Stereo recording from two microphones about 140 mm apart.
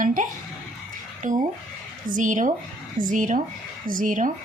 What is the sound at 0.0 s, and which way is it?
Music, 70° right (ahead or behind).